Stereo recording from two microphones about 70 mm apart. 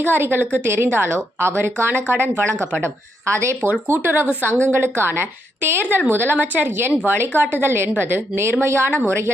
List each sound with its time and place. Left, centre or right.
0.0 s a woman's voice: right